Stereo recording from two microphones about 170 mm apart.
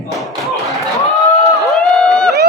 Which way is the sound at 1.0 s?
20° left (ahead or behind).